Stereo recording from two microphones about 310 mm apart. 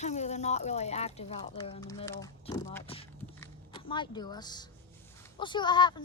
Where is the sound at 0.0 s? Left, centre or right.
Left.